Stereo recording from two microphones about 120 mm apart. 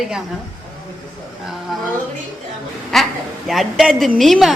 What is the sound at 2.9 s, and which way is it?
A woman's voice, centre (ahead or behind).